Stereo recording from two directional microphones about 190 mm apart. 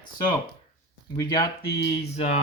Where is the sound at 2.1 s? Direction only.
35° left (ahead or behind).